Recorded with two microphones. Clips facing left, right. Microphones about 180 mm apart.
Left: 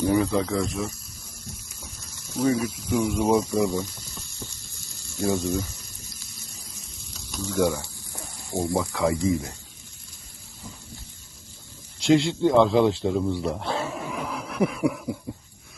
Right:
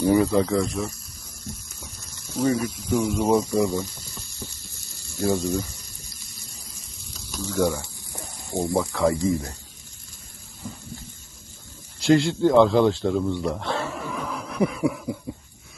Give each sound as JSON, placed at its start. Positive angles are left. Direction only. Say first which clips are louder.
{"t": 0.0, "sound": "speech", "louder": "right 3 dB", "side_deg": 0}
{"t": 2.2, "sound": "speech", "louder": "even", "side_deg": 0}
{"t": 5.1, "sound": "speech", "louder": "right 1 dB", "side_deg": 0}
{"t": 6.1, "sound": "water", "louder": "left 1 dB", "side_deg": 0}
{"t": 7.1, "sound": "frying", "louder": "even", "side_deg": 0}
{"t": 8.1, "sound": "a sound", "louder": "right 1 dB", "side_deg": -20}
{"t": 8.9, "sound": "speech", "louder": "right 2 dB", "side_deg": 0}
{"t": 11.9, "sound": "speech", "louder": "right 1 dB", "side_deg": 0}
{"t": 14.2, "sound": "a sound", "louder": "right 1 dB", "side_deg": 0}